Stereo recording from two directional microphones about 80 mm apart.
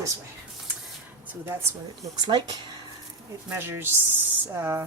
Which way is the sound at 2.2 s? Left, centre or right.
Right.